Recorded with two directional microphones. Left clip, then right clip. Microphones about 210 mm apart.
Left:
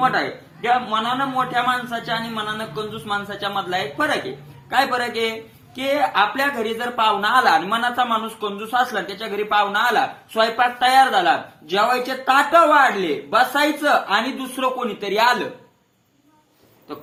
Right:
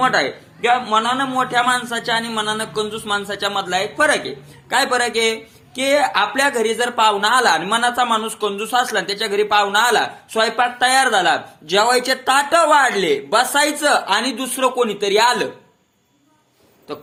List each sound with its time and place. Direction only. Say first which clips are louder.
0.0 s speech: right 3 dB; 35° right (ahead or behind)